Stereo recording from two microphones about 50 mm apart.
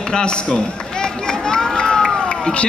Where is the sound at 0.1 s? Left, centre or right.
Centre.